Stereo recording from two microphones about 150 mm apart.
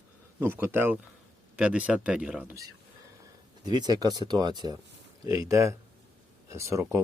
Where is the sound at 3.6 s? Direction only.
30° right (ahead or behind).